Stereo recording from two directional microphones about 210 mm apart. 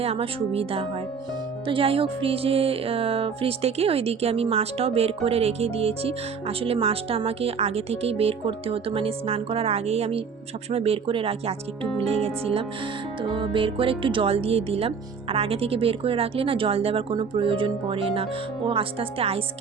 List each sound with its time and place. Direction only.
0.0 s speech: 25° right (ahead or behind)